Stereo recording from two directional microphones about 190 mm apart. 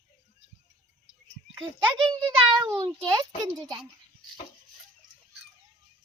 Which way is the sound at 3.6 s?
20° right (ahead or behind).